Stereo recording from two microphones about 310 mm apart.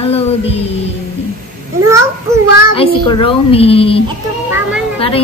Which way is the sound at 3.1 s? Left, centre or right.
Centre.